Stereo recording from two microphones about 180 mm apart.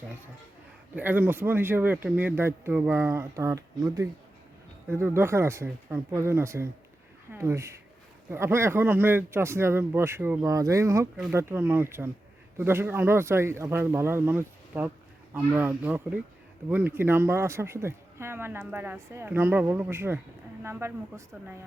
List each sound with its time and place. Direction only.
0.9 s speech: 10° right (ahead or behind)